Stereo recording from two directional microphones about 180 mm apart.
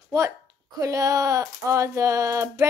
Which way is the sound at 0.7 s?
20° right (ahead or behind).